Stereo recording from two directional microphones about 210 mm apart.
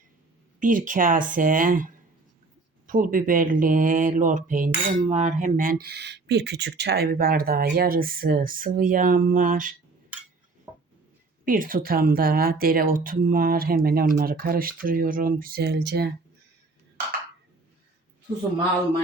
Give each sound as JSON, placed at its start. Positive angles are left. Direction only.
{"t": 0.6, "sound": "speech", "side_deg": -40}
{"t": 11.4, "sound": "speech", "side_deg": -40}